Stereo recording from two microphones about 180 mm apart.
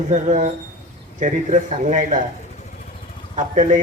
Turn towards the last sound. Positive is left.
turn(degrees=-45)  # may be behind; listen again after turning